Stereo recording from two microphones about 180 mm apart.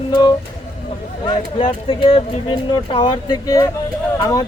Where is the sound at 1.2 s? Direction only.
30° left (ahead or behind).